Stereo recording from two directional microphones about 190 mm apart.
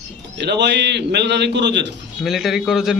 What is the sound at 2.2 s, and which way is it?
Speech, centre (ahead or behind).